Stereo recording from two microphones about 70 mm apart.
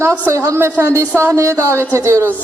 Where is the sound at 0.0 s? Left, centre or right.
Right.